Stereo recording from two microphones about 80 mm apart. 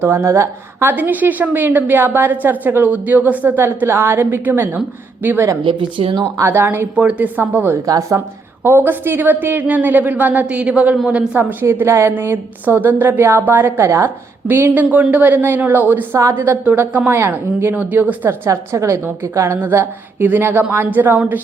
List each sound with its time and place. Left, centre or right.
0.0 s a woman's voice: right
5.6 s speech: right
6.4 s a woman's voice: right
6.9 s a woman's voice: centre
7.9 s speech: right
8.6 s a woman's voice: right
11.6 s a woman's voice: right
14.4 s a woman's voice: right
18.3 s a woman's voice: right